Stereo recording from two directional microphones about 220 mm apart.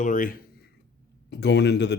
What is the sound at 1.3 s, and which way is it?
Speech, 50° left (ahead or behind).